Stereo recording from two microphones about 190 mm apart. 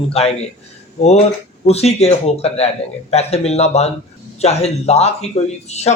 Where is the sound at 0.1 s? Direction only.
30° left (ahead or behind).